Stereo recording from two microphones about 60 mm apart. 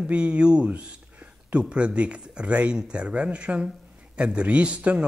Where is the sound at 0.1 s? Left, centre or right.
Centre.